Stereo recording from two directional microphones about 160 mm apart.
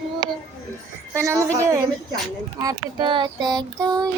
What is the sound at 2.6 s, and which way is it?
Child singing, 30° right (ahead or behind).